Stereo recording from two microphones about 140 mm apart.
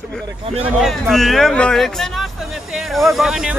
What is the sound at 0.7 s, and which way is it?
Speech, centre (ahead or behind).